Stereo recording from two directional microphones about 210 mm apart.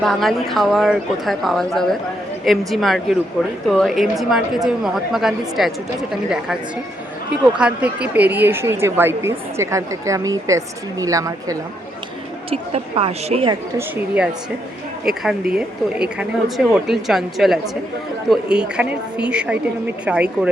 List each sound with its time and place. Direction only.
0.0 s a woman's voice: centre (ahead or behind)
7.6 s a woman's voice: 5° right (ahead or behind)
12.5 s a woman's voice: 25° right (ahead or behind)
13.7 s a woman's voice: 10° right (ahead or behind)